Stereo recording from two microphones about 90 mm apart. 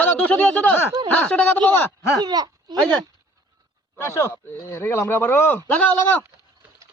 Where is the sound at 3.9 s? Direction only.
30° left (ahead or behind).